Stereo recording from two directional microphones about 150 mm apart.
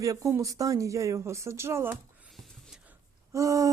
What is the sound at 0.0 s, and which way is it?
Speech, 20° right (ahead or behind).